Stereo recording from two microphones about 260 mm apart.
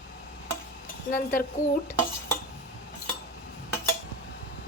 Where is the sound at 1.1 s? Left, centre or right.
Left.